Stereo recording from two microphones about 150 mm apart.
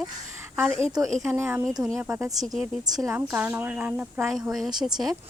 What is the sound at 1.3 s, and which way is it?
Speech, 15° right (ahead or behind).